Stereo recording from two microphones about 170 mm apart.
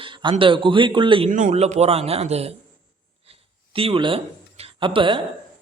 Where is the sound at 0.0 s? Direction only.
30° right (ahead or behind).